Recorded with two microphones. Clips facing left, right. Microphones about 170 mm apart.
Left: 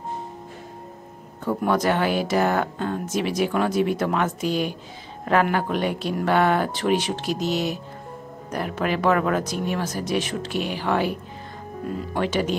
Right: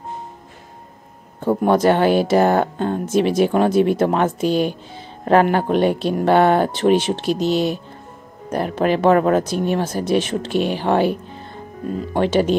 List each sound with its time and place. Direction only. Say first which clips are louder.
1.4 s speech: right 6 dB; 30° right (ahead or behind)